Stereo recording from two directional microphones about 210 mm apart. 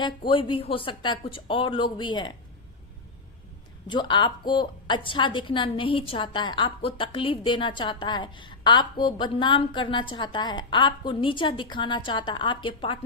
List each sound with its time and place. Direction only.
0.3 s a woman's voice: 25° left (ahead or behind)
3.8 s a woman's voice: 20° left (ahead or behind)